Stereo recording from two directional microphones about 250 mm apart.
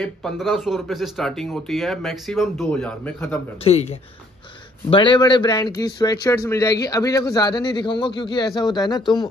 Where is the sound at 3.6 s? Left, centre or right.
Left.